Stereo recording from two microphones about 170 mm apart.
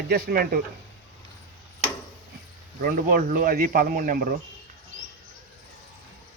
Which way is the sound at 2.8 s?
55° right (ahead or behind).